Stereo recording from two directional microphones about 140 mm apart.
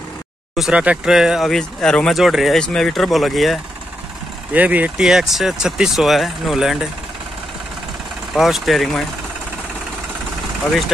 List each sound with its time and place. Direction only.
0.6 s speech: 5° right (ahead or behind)
4.6 s speech: 10° right (ahead or behind)
8.4 s speech: centre (ahead or behind)